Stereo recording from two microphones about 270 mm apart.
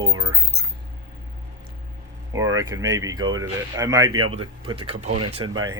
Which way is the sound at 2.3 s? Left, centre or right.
Centre.